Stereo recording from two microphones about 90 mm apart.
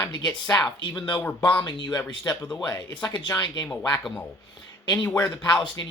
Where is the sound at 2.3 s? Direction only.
45° left (ahead or behind); by 3.2 s 60° left (ahead or behind).